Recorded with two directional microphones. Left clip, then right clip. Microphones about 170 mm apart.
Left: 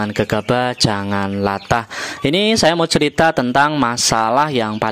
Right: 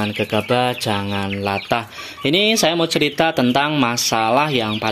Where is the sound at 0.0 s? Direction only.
40° left (ahead or behind).